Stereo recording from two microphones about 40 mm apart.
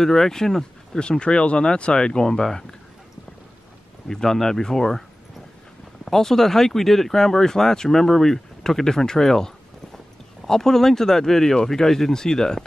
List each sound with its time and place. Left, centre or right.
0.0 s speech: centre
0.9 s speech: left
4.1 s speech: centre
6.0 s speech: centre